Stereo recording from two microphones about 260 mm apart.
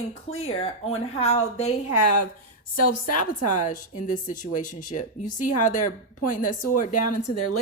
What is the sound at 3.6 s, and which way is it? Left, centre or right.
A woman's voice, left.